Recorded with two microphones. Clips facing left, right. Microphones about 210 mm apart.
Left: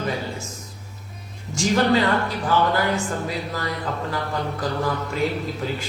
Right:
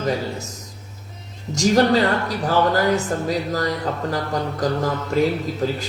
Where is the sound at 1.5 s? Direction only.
40° right (ahead or behind).